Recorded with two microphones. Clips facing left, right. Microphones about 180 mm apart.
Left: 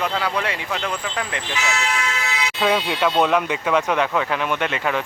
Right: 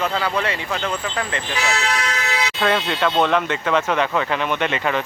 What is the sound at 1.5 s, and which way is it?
Speech, 35° right (ahead or behind).